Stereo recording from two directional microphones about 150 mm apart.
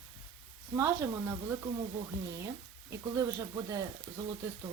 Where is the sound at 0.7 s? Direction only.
15° right (ahead or behind).